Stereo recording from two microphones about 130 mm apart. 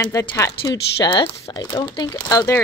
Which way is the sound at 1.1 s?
35° left (ahead or behind).